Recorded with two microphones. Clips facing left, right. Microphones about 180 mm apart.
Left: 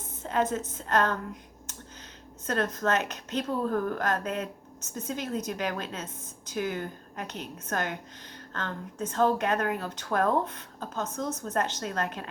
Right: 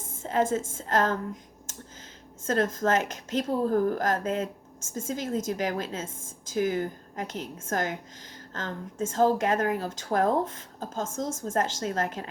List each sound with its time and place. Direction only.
0.2 s a sound: 25° right (ahead or behind)
0.7 s a woman's voice: 25° right (ahead or behind)
2.5 s a woman's voice: 25° right (ahead or behind)
11.1 s speech: 45° right (ahead or behind)
11.4 s a woman's voice: 25° right (ahead or behind)